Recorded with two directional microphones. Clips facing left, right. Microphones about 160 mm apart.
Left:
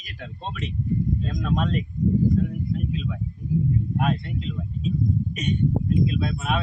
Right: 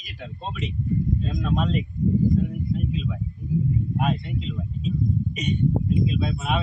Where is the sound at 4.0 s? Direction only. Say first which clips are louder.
Even; centre (ahead or behind).